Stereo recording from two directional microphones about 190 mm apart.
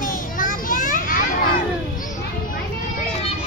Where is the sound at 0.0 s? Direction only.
45° left (ahead or behind).